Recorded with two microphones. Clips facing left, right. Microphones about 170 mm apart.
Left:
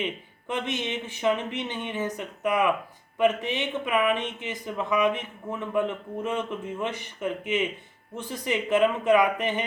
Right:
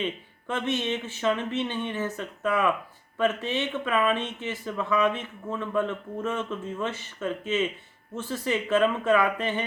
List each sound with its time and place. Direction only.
0.0 s speech: 15° left (ahead or behind)